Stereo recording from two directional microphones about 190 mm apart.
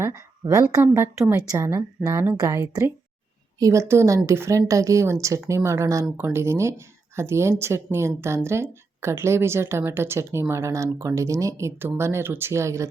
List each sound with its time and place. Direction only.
0.0 s speech: 15° right (ahead or behind)